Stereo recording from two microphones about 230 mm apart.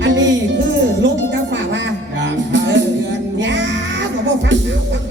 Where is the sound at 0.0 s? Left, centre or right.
Right.